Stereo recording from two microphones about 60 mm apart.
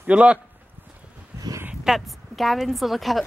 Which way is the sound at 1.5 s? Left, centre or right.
Right.